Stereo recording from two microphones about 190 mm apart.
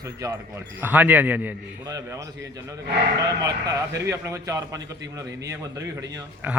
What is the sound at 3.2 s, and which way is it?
A man's voice, 20° right (ahead or behind).